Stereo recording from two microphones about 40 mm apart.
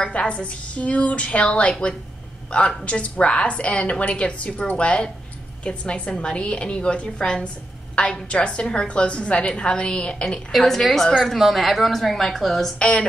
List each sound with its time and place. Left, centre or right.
0.0 s a woman's voice: left
10.5 s a woman's voice: centre
12.7 s a woman's voice: left